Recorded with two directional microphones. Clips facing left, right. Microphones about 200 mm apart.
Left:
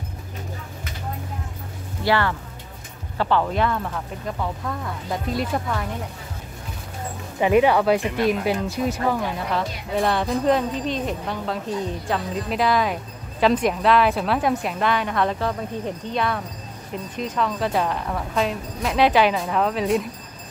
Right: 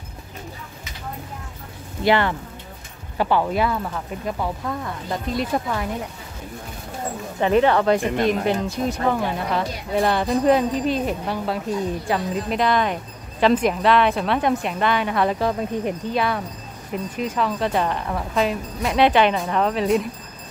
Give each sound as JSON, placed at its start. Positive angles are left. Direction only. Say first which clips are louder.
{"t": 2.0, "sound": "speech", "louder": "right 2 dB", "side_deg": -20}
{"t": 7.3, "sound": "speech", "louder": "even", "side_deg": 10}